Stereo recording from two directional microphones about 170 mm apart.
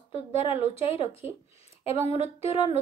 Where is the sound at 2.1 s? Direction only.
35° left (ahead or behind).